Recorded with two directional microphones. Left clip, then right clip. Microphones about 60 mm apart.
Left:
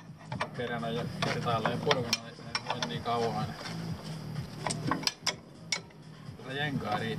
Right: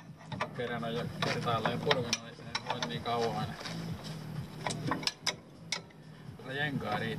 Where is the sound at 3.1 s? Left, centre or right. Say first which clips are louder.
Left 1 dB; right.